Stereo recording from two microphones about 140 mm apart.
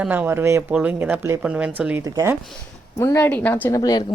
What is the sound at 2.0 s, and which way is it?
Speech, 20° right (ahead or behind).